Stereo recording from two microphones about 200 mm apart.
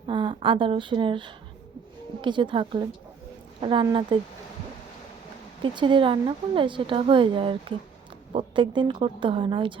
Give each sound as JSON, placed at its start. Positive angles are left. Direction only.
{"t": 0.1, "sound": "speech", "side_deg": -25}
{"t": 5.6, "sound": "speech", "side_deg": -25}